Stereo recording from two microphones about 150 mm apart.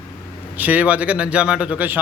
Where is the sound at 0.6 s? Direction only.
10° right (ahead or behind).